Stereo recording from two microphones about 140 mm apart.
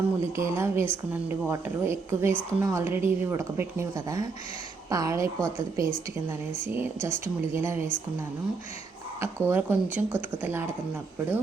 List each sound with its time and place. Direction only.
0.2 s a woman's voice: 20° right (ahead or behind)
9.2 s speech: 15° right (ahead or behind)